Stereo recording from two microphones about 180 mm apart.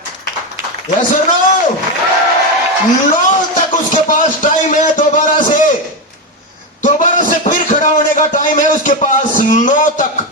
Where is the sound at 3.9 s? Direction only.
45° left (ahead or behind).